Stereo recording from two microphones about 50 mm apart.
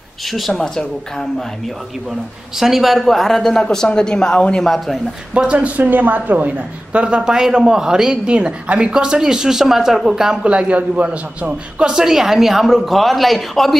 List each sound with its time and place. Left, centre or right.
0.3 s speech: centre
2.5 s speech: centre
4.6 s speech: centre
5.5 s a woman's voice: right
6.5 s a man's voice: right
10.4 s a man's voice: right
11.9 s speech: centre